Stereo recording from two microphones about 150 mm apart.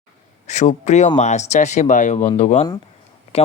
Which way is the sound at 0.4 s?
50° left (ahead or behind).